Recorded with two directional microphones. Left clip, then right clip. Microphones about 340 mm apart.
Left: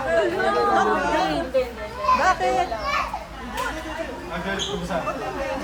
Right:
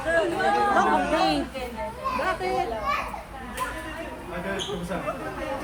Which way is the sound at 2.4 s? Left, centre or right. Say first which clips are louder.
Left 5 dB; left.